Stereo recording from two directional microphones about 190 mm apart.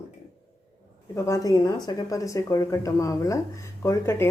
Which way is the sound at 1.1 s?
15° left (ahead or behind).